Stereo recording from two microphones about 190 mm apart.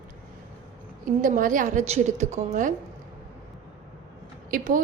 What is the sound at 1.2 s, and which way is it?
A woman's voice, 45° right (ahead or behind).